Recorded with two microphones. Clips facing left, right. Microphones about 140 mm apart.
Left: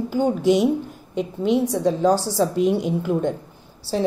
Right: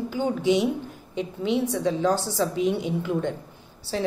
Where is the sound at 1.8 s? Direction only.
40° left (ahead or behind).